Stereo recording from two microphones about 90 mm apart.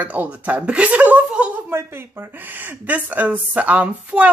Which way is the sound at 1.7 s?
25° right (ahead or behind).